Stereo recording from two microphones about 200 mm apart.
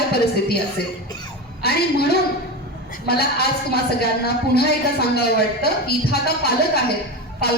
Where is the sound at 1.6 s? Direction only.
50° left (ahead or behind).